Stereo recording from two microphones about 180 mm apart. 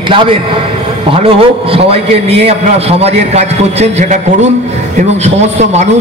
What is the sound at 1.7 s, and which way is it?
A man's voice, 35° right (ahead or behind).